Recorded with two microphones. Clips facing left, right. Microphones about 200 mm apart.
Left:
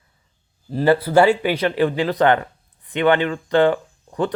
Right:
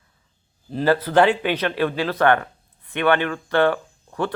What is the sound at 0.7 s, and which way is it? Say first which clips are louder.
Speech: left 3 dB; 10° left (ahead or behind).